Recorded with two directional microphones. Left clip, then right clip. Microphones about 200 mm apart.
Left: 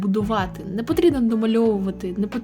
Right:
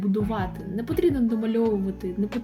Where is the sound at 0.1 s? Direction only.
35° left (ahead or behind).